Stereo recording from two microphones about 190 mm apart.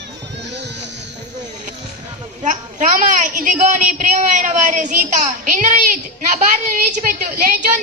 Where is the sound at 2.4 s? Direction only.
45° right (ahead or behind).